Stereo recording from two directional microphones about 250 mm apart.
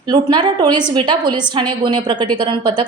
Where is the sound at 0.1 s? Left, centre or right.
Centre.